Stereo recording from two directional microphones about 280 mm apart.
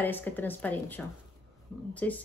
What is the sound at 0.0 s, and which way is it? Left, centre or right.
A woman's voice, centre.